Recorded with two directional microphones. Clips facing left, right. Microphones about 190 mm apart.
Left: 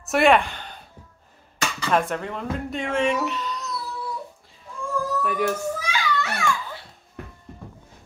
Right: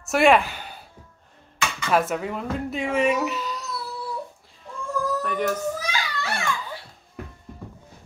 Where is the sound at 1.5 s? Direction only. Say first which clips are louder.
Even; 40° left (ahead or behind).